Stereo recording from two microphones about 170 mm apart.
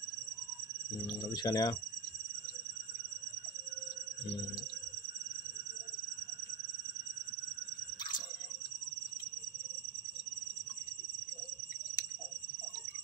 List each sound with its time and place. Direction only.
1.2 s speech: 25° left (ahead or behind)